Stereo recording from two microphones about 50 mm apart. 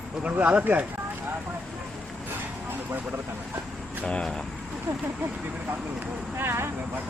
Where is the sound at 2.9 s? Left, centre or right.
Right.